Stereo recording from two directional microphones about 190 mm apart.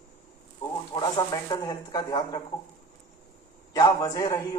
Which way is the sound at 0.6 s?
25° left (ahead or behind).